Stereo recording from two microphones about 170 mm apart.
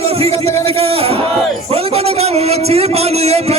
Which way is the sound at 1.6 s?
35° right (ahead or behind).